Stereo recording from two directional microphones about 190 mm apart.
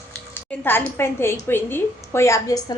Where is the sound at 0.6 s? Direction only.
10° left (ahead or behind).